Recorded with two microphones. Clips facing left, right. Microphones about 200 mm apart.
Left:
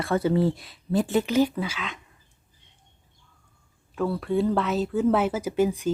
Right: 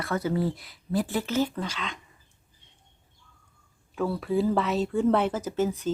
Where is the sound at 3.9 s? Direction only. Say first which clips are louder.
Left 1 dB; centre (ahead or behind).